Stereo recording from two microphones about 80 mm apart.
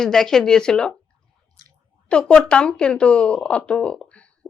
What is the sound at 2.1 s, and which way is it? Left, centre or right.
Speech, centre.